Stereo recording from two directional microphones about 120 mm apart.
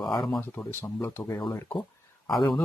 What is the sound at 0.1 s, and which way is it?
Speech, centre (ahead or behind).